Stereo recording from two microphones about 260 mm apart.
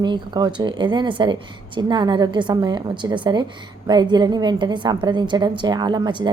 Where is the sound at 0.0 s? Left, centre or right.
Centre.